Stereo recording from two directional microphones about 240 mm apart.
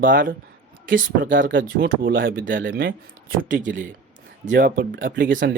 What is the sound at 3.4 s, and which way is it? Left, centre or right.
Speech, right.